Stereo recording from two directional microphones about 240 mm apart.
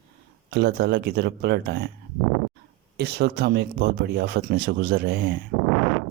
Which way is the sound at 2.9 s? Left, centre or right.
Right.